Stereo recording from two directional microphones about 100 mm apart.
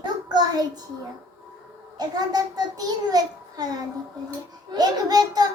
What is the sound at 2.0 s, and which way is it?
A child's voice, 40° right (ahead or behind).